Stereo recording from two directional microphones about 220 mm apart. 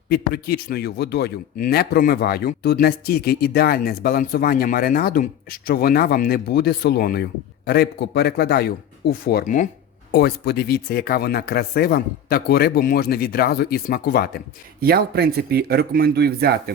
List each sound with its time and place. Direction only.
0.1 s speech: 45° left (ahead or behind)
14.8 s speech: 45° right (ahead or behind)